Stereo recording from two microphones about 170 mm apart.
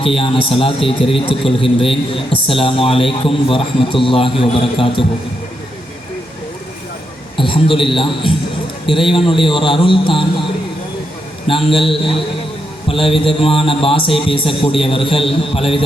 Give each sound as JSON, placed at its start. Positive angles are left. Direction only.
{"t": 0.0, "sound": "a man's voice", "side_deg": 35}
{"t": 7.3, "sound": "a man's voice", "side_deg": 30}
{"t": 11.4, "sound": "a man's voice", "side_deg": 30}
{"t": 12.9, "sound": "a man's voice", "side_deg": 35}